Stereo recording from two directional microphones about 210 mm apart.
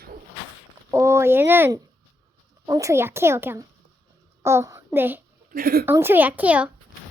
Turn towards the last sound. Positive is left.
turn(degrees=-5)  # may be behind; listen again after turning